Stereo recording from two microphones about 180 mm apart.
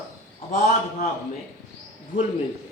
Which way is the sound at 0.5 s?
50° left (ahead or behind).